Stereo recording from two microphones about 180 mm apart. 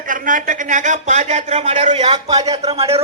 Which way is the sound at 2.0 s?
25° right (ahead or behind).